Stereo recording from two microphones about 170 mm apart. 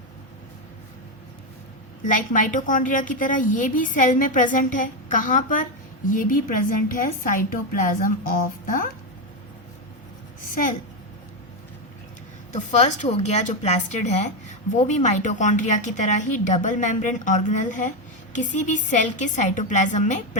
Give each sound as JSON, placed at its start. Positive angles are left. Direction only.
{"t": 2.0, "sound": "a woman's voice", "side_deg": 50}
{"t": 10.5, "sound": "a woman's voice", "side_deg": 50}
{"t": 12.5, "sound": "a woman's voice", "side_deg": 45}